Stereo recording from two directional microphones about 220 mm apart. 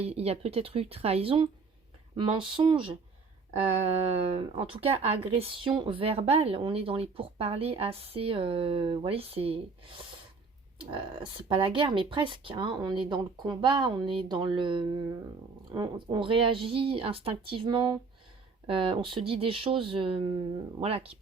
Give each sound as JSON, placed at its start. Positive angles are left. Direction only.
{"t": 0.0, "sound": "speech", "side_deg": -25}
{"t": 10.8, "sound": "speech", "side_deg": -20}